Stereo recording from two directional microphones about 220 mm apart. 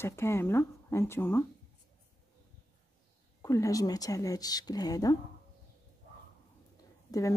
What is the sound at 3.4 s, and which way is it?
Speech, 15° left (ahead or behind).